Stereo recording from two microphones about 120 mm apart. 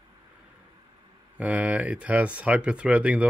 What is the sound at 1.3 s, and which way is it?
Speech, 10° right (ahead or behind).